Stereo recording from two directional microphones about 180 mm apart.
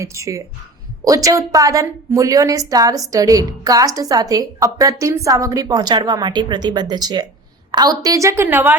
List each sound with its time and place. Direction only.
0.0 s a woman's voice: 15° right (ahead or behind)